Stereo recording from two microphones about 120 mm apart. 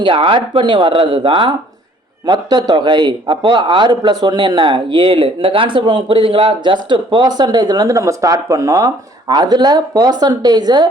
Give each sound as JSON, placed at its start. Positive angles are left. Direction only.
{"t": 0.0, "sound": "a man's voice", "side_deg": -45}